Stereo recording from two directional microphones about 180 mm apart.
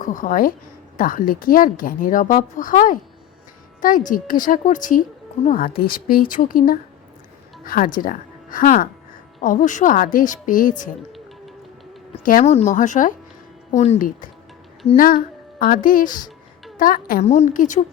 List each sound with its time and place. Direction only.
0.0 s speech: 45° left (ahead or behind)
12.2 s speech: 45° left (ahead or behind)
14.9 s a sound: 50° left (ahead or behind)
16.0 s speech: 20° left (ahead or behind)
16.7 s a woman's voice: 50° left (ahead or behind)